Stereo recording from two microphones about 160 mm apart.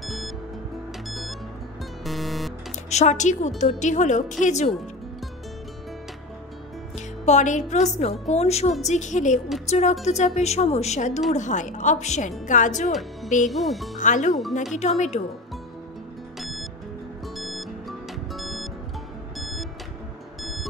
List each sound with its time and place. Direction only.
0.0 s music: centre (ahead or behind)
2.0 s music: centre (ahead or behind)
2.9 s a woman's voice: 45° left (ahead or behind)
7.2 s a woman's voice: 50° left (ahead or behind)
13.5 s speech: centre (ahead or behind)
13.9 s a woman's voice: 50° left (ahead or behind)
16.3 s music: centre (ahead or behind)